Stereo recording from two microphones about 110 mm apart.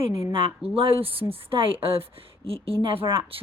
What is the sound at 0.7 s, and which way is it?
Speech, 60° right (ahead or behind).